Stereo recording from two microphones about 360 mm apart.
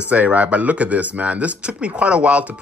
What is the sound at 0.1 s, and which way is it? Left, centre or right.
Speech, centre.